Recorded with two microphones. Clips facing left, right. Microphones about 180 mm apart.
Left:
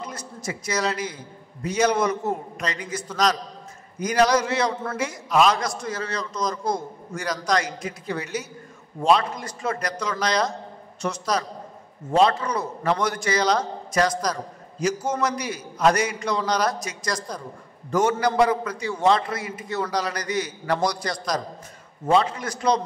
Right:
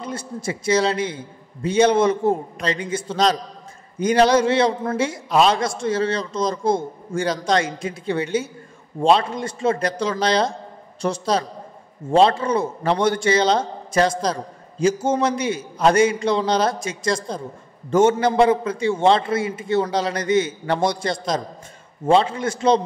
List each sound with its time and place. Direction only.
0.0 s a man's voice: 30° right (ahead or behind)